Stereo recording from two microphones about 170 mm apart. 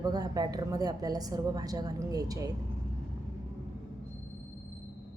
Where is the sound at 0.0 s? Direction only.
25° right (ahead or behind).